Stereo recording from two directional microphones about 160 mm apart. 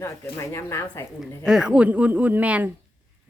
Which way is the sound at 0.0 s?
15° left (ahead or behind).